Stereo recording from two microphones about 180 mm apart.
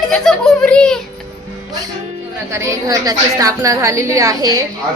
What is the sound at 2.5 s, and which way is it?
A woman's voice, 15° right (ahead or behind).